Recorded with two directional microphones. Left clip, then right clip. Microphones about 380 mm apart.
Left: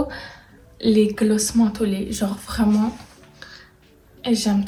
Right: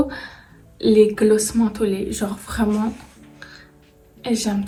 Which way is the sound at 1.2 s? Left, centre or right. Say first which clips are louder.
Right 5 dB; left.